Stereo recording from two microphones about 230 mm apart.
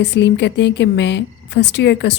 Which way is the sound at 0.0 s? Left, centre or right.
Left.